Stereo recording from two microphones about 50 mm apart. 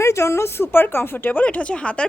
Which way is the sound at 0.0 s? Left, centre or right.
Left.